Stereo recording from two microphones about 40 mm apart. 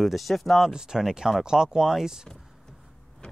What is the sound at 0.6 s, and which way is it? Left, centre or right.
Speech, centre.